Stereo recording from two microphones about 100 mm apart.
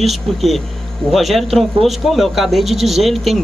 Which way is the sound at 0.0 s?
Centre (ahead or behind).